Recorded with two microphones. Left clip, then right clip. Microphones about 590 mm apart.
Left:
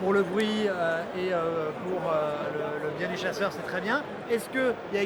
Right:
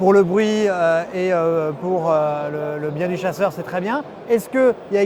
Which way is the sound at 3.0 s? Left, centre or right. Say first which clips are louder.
Right 11 dB; right.